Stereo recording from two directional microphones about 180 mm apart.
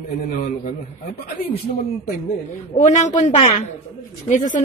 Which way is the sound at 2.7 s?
40° left (ahead or behind).